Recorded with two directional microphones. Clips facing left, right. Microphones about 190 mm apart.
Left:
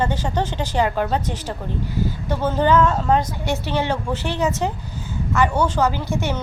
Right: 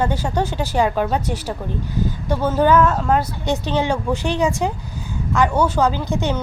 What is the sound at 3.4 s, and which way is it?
A woman's voice, 15° right (ahead or behind).